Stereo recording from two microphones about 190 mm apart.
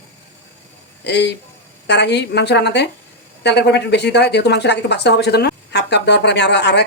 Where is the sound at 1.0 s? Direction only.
65° left (ahead or behind).